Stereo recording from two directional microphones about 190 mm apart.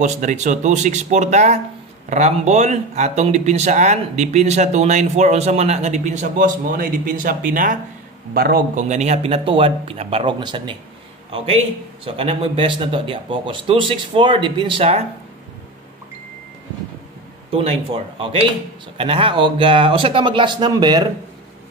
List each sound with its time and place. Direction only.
0.0 s a man's voice: 40° right (ahead or behind)
17.5 s a man's voice: 30° right (ahead or behind)